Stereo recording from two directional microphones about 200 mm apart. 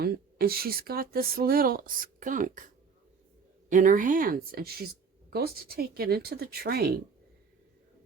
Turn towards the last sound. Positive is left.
turn(degrees=-50)  # may be behind; listen again after turning